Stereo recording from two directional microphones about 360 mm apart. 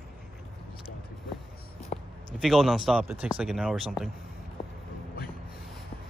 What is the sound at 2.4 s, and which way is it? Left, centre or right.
Speech, centre.